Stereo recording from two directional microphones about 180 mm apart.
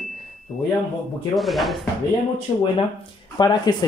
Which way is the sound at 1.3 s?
Centre (ahead or behind).